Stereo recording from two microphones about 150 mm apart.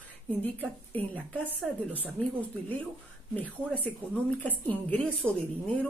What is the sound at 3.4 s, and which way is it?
Speech, 10° left (ahead or behind).